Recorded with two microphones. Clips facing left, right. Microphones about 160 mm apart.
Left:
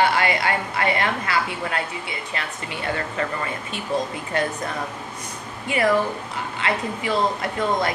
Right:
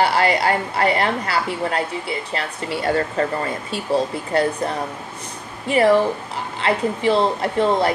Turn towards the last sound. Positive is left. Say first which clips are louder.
# right 5 dB
turn(degrees=-30)  # may be behind; listen again after turning